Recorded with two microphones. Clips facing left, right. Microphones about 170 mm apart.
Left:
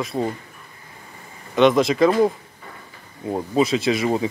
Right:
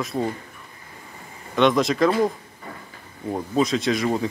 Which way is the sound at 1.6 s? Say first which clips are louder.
Left 3 dB; centre (ahead or behind).